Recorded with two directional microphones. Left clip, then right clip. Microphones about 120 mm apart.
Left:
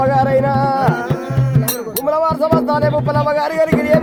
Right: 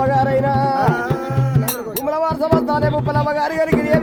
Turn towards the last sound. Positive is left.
turn(degrees=15)  # may be behind; listen again after turning